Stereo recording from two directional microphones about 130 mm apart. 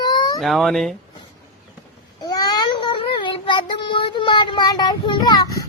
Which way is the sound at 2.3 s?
30° left (ahead or behind).